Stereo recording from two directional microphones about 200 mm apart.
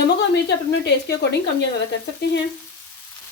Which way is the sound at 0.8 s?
60° left (ahead or behind).